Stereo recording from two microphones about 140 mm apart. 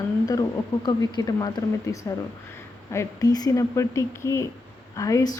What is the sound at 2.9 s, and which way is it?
Speech, 25° left (ahead or behind).